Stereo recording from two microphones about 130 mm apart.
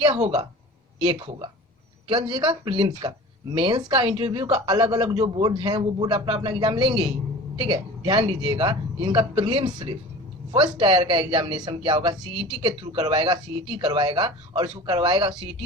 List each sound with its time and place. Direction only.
0.2 s speech: 55° right (ahead or behind)
2.0 s speech: 40° right (ahead or behind)